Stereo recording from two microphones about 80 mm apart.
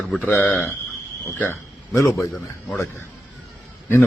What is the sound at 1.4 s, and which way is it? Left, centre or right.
Cricket, left.